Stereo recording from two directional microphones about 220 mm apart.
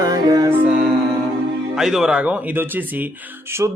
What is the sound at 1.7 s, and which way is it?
Speech, centre (ahead or behind).